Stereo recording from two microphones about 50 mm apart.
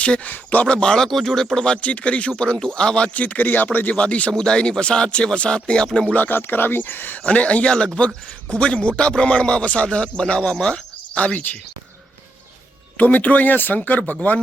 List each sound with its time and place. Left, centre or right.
0.0 s speech: left
0.8 s a man's voice: centre
1.0 s a man's voice: centre; by 3.9 s left
3.9 s a man's voice: left
6.1 s speech: left
7.2 s a man's voice: left
13.0 s speech: left